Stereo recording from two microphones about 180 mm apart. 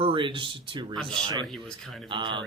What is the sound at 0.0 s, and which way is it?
Speech, 30° right (ahead or behind).